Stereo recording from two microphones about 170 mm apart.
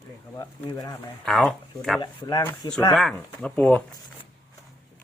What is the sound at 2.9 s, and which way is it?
Speech, centre (ahead or behind).